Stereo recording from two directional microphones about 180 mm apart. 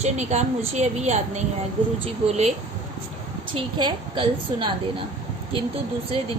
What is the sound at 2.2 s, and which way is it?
Speech, 35° right (ahead or behind).